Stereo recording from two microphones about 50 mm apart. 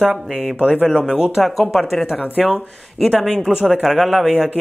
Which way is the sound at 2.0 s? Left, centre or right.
Centre.